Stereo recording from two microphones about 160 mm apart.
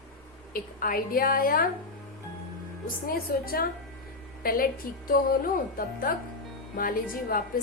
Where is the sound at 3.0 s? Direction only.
65° left (ahead or behind).